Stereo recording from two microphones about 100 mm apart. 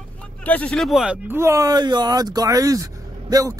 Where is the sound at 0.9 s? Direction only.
5° right (ahead or behind).